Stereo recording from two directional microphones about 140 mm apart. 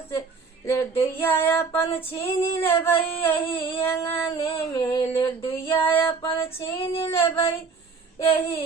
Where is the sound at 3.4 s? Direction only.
40° left (ahead or behind).